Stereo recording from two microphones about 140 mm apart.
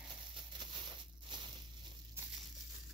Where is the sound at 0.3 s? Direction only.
35° right (ahead or behind).